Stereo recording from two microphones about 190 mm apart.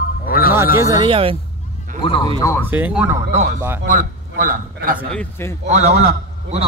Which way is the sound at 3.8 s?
45° right (ahead or behind).